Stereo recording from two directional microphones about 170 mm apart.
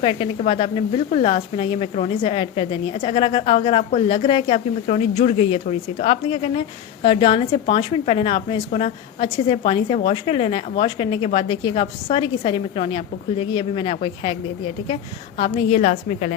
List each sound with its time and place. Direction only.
0.0 s speech: 30° left (ahead or behind)
15.4 s a woman's voice: 35° left (ahead or behind)